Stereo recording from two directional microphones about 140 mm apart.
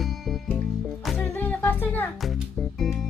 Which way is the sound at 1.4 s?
15° left (ahead or behind).